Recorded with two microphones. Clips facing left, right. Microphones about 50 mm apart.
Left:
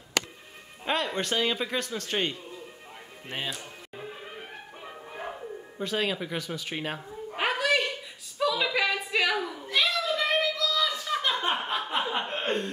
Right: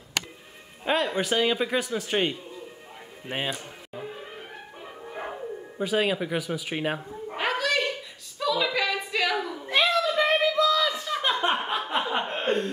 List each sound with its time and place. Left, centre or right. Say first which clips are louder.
0.8 s a man's voice: right 3 dB; centre
3.4 s music: right 4 dB; centre
4.1 s music: right 2 dB; centre
5.1 s speech: right 3 dB; centre
7.3 s a sound: even; centre
9.7 s a sound: right 4 dB; right
11.1 s chuckle: right 3 dB; centre